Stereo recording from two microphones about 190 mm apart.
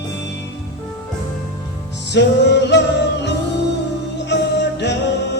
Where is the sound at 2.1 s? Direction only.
65° left (ahead or behind).